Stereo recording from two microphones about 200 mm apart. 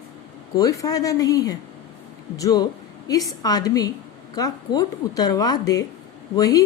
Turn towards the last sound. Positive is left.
turn(degrees=15)  # may be behind; listen again after turning